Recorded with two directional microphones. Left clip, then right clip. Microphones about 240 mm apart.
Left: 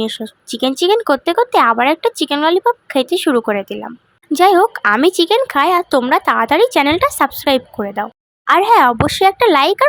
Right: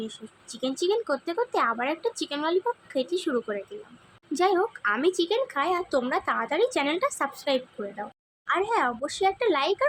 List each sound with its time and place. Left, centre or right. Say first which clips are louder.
0.0 s speech: left 17 dB; left